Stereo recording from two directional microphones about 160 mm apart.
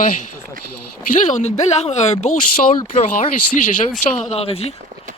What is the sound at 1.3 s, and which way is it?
Speech, 45° left (ahead or behind).